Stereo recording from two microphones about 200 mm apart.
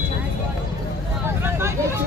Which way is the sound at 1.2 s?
10° right (ahead or behind).